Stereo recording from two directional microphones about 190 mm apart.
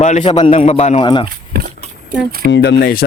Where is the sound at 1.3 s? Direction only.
50° right (ahead or behind).